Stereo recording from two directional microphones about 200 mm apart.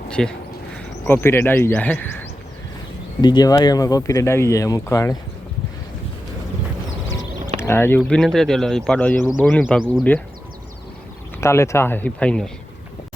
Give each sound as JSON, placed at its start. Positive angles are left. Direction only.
{"t": 0.1, "sound": "speech", "side_deg": 5}
{"t": 3.2, "sound": "speech", "side_deg": 20}
{"t": 7.6, "sound": "speech", "side_deg": 10}
{"t": 11.3, "sound": "speech", "side_deg": 15}